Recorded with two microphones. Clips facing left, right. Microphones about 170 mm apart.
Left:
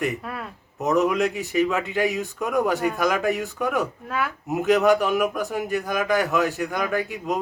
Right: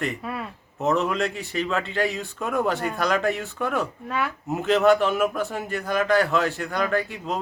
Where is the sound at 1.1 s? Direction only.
15° left (ahead or behind).